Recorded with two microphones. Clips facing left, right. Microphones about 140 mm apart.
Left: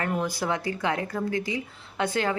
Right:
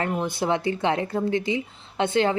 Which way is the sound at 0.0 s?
25° right (ahead or behind).